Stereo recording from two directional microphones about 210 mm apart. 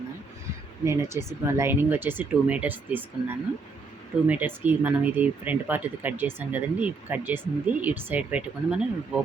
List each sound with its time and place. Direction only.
0.9 s speech: 15° right (ahead or behind)